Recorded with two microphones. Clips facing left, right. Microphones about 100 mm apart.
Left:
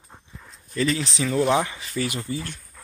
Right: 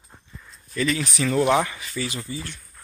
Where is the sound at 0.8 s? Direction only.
30° left (ahead or behind).